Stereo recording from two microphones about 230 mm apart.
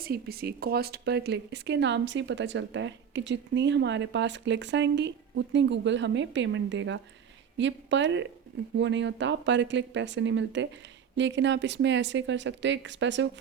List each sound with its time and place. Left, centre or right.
0.0 s a woman's voice: right